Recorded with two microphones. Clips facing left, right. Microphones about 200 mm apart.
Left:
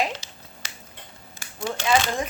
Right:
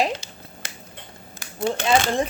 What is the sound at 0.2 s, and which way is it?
Finger snapping, 50° right (ahead or behind).